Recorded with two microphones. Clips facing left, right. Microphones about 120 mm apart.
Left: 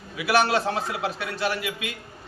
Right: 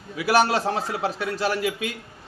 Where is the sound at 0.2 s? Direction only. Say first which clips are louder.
Right 2 dB; 40° right (ahead or behind).